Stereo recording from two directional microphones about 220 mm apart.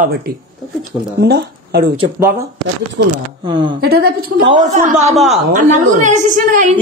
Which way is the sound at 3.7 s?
45° right (ahead or behind).